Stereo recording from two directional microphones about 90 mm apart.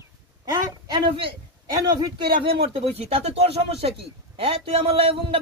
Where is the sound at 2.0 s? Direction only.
80° right.